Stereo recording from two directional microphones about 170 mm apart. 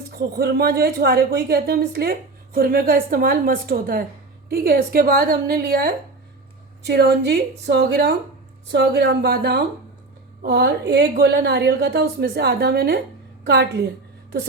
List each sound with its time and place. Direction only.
0.1 s a woman's voice: 65° right (ahead or behind)
8.7 s a woman's voice: 80° right